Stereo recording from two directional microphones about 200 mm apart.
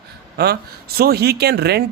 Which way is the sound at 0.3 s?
50° right (ahead or behind).